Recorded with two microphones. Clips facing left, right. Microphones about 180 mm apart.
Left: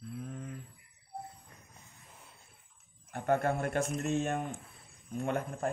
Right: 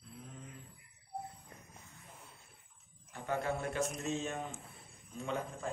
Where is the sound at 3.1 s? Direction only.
55° left (ahead or behind).